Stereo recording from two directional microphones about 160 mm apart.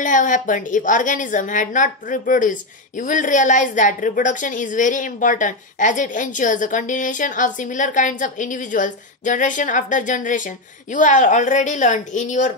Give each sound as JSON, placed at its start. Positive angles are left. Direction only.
{"t": 0.0, "sound": "a woman's voice", "side_deg": 55}